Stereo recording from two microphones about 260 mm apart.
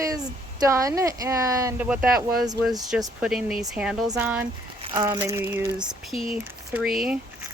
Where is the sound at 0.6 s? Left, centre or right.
Centre.